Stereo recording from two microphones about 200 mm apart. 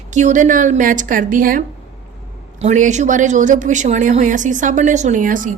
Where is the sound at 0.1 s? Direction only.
40° right (ahead or behind).